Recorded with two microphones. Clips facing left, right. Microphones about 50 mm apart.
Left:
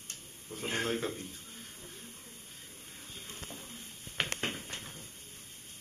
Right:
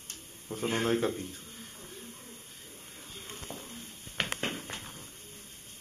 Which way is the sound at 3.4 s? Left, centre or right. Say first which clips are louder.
Right 3 dB; centre.